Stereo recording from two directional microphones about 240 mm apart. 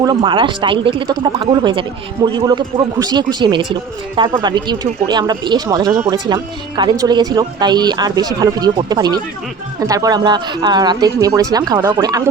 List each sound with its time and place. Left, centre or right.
0.0 s a man's voice: centre